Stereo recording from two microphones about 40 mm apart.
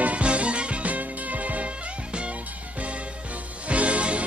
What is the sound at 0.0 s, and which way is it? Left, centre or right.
Music, right.